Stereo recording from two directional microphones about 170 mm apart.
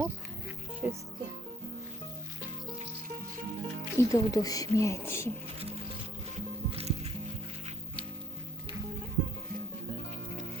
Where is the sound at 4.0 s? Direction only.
20° left (ahead or behind).